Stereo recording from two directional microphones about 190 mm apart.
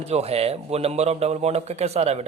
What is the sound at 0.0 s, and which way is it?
A man's voice, 35° right (ahead or behind).